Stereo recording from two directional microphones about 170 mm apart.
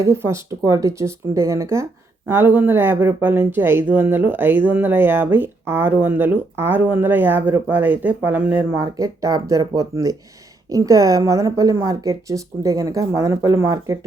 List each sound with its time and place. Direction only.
0.0 s a woman's voice: 15° right (ahead or behind)